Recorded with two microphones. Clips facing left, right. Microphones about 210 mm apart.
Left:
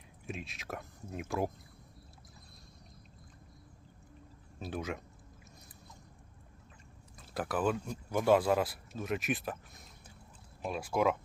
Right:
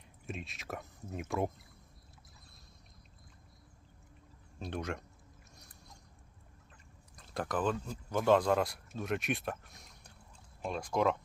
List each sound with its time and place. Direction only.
0.3 s speech: centre (ahead or behind)
4.6 s speech: centre (ahead or behind)
7.2 s speech: 5° left (ahead or behind)